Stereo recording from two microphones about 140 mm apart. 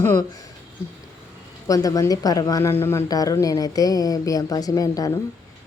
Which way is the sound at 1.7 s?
25° left (ahead or behind).